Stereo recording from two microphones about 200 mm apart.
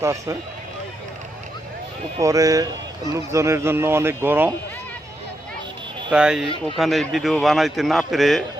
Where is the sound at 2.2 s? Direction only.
15° right (ahead or behind).